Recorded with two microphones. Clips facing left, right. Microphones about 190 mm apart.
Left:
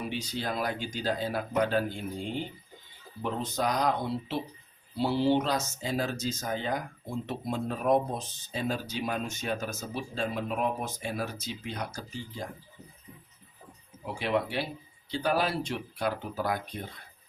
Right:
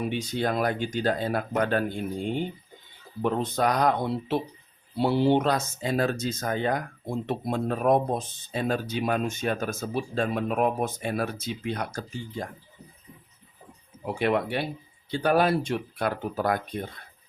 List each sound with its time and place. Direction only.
0.1 s speech: 55° right (ahead or behind)
3.2 s speech: 60° right (ahead or behind)
14.0 s speech: 55° right (ahead or behind)